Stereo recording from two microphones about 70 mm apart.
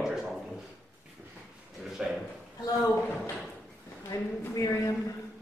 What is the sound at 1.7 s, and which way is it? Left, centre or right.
Speech, centre.